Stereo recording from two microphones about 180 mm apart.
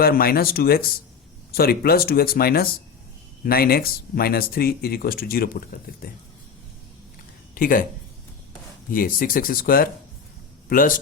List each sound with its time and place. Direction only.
0.0 s speech: 55° left (ahead or behind)
7.5 s speech: 50° left (ahead or behind)
8.9 s speech: 50° left (ahead or behind)